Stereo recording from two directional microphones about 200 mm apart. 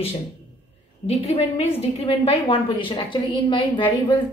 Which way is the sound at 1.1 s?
30° left (ahead or behind).